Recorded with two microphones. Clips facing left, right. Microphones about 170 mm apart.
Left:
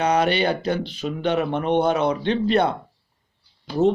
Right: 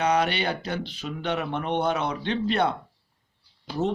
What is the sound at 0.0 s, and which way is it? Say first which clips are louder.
A man's voice: left 4 dB; 40° left (ahead or behind).